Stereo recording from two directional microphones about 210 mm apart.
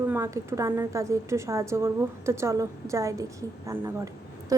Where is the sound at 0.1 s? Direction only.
15° right (ahead or behind).